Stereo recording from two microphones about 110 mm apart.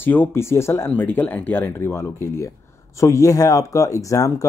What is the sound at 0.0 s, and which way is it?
Speech, 20° left (ahead or behind).